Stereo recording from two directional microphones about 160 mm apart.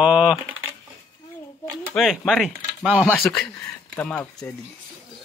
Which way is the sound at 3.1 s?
15° left (ahead or behind).